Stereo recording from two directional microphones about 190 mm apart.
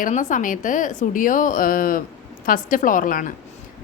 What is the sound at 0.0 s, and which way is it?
A woman's voice, 40° left (ahead or behind).